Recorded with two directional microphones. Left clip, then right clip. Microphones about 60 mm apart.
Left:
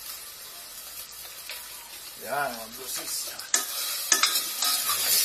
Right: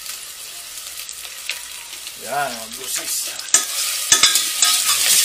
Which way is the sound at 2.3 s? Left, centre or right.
Centre.